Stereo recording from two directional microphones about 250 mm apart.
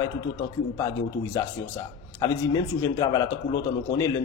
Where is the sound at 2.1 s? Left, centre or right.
Centre.